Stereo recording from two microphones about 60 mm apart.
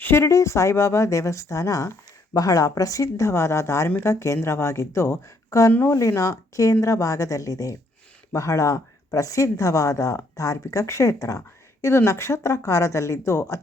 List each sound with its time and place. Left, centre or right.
0.0 s speech: left
0.3 s speech: left